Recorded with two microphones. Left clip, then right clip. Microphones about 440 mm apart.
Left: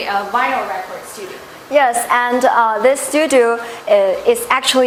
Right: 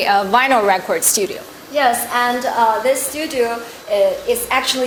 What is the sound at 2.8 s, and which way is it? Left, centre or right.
A woman's voice, left.